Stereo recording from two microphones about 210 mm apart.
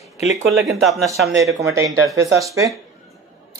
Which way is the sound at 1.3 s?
15° right (ahead or behind).